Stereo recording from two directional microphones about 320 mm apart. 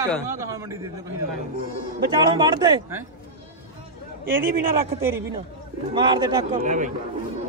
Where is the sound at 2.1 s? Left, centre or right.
Centre.